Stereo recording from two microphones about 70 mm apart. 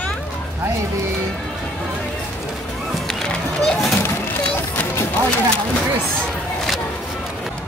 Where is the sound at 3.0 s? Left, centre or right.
Centre.